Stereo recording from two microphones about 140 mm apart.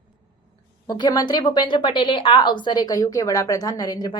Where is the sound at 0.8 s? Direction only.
30° left (ahead or behind).